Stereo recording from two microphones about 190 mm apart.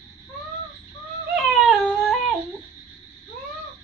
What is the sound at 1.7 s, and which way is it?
Baby cry, centre (ahead or behind).